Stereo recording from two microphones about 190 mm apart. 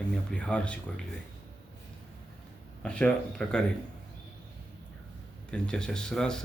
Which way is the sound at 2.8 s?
5° left (ahead or behind).